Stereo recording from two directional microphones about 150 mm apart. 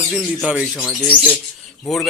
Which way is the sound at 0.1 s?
5° right (ahead or behind).